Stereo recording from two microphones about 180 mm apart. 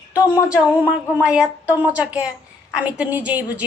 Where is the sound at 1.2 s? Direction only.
5° right (ahead or behind).